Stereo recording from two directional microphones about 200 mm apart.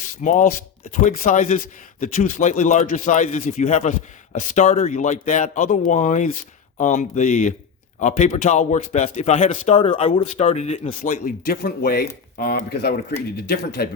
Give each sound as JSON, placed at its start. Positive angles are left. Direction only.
{"t": 0.2, "sound": "speech", "side_deg": 40}
{"t": 11.1, "sound": "speech", "side_deg": 45}